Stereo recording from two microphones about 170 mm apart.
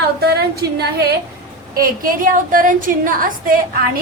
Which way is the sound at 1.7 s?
55° right (ahead or behind).